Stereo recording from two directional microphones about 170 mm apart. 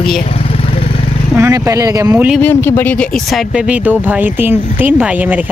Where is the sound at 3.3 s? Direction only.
Centre (ahead or behind).